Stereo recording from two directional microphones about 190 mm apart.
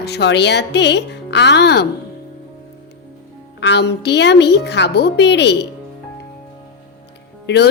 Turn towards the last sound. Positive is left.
turn(degrees=60)  # may be behind; listen again after turning